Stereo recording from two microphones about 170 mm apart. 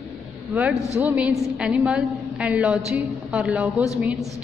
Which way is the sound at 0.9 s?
10° right (ahead or behind).